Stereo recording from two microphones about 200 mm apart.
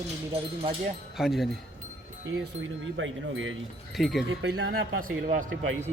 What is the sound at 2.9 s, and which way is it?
Speech, 75° right (ahead or behind).